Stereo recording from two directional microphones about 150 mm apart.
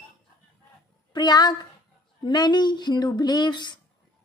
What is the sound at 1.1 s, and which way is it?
A woman's voice, 30° left (ahead or behind).